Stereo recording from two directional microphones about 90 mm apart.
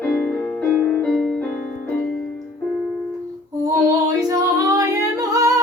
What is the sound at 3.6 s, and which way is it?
Female singing, 40° right (ahead or behind).